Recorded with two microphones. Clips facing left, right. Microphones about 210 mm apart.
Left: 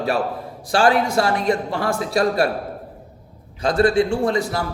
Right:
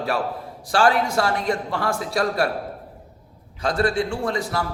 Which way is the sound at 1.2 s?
10° left (ahead or behind).